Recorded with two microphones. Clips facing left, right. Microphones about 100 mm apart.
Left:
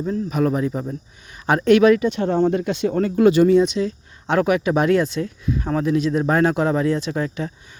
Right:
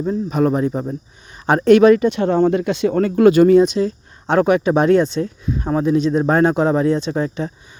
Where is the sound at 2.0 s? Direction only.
80° right.